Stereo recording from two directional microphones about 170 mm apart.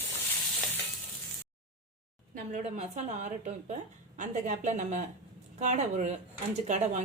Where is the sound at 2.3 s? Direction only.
50° right (ahead or behind).